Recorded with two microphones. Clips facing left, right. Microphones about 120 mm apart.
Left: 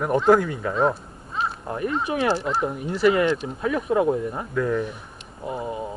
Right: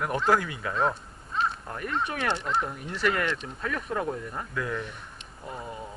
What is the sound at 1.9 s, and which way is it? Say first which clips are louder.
Speech: left 5 dB; 5° left (ahead or behind).